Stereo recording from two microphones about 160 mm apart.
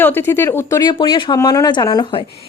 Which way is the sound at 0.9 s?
30° left (ahead or behind).